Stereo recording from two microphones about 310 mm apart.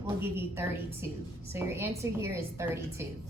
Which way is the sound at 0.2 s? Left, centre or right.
Centre.